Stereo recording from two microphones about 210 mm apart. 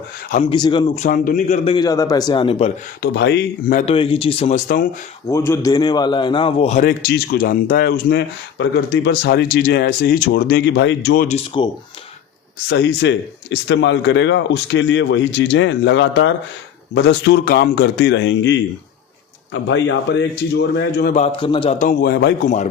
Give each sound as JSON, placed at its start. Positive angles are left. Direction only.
{"t": 0.5, "sound": "speech", "side_deg": 20}
{"t": 1.7, "sound": "a man's voice", "side_deg": 20}
{"t": 3.0, "sound": "speech", "side_deg": 55}
{"t": 3.8, "sound": "a man's voice", "side_deg": 25}
{"t": 5.5, "sound": "a man's voice", "side_deg": 15}
{"t": 7.1, "sound": "speech", "side_deg": 45}
{"t": 11.3, "sound": "a man's voice", "side_deg": 25}
{"t": 12.6, "sound": "a man's voice", "side_deg": 55}
{"t": 19.6, "sound": "a man's voice", "side_deg": 60}
{"t": 21.2, "sound": "a man's voice", "side_deg": 25}
{"t": 21.8, "sound": "speech", "side_deg": 45}